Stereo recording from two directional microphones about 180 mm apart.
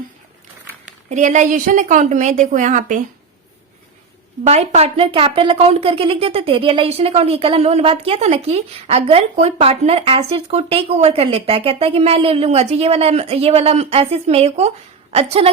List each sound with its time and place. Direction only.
0.9 s a woman's voice: 45° right (ahead or behind)
4.4 s a woman's voice: 35° right (ahead or behind)